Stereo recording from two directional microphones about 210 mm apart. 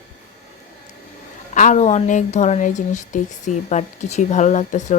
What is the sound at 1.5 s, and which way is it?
Speech, 35° left (ahead or behind).